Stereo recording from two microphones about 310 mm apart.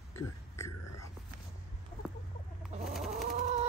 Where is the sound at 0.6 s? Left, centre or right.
Centre.